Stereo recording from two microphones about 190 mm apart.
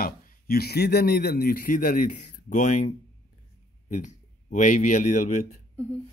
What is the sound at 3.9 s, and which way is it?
Speech, 40° left (ahead or behind).